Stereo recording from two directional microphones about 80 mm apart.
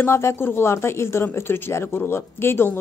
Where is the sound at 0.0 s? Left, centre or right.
Left.